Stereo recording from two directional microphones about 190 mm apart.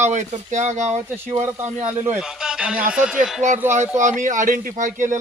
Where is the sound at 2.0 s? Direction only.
5° right (ahead or behind).